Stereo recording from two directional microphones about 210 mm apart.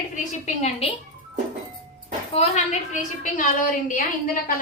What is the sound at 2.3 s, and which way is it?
A woman's voice, 30° left (ahead or behind).